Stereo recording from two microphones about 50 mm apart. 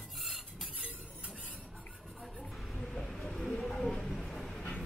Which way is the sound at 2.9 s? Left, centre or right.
Centre.